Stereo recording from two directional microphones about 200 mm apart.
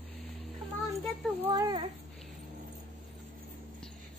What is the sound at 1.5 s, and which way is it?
Speech, 20° right (ahead or behind).